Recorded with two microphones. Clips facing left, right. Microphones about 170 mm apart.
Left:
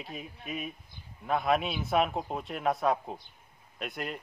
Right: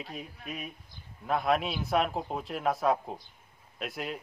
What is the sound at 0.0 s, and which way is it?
Speech, centre (ahead or behind).